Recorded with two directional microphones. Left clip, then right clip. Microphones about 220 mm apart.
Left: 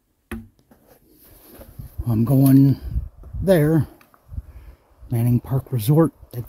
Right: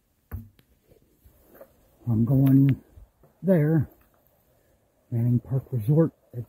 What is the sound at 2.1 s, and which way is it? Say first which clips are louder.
Speech: left 6 dB; 15° left (ahead or behind).